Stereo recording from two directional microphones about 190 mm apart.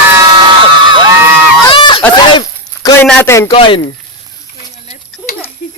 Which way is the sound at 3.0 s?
10° left (ahead or behind).